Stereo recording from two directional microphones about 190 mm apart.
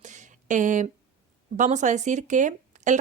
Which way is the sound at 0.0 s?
40° right (ahead or behind).